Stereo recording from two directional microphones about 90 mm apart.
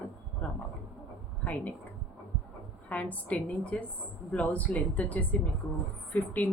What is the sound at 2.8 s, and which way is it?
Speech, 15° left (ahead or behind).